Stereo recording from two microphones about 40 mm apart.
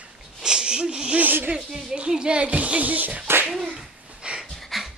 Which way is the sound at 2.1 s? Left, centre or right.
Right.